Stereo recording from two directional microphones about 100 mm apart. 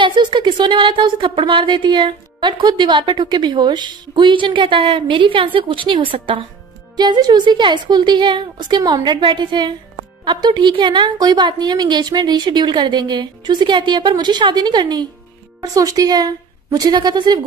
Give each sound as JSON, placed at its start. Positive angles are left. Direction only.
{"t": 0.0, "sound": "speech", "side_deg": -50}
{"t": 7.0, "sound": "a woman's voice", "side_deg": -45}